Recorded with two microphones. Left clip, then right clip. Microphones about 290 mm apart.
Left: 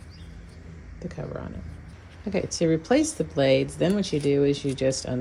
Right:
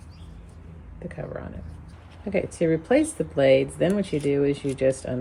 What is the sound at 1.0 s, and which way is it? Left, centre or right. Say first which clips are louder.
Speech: right 1 dB; centre.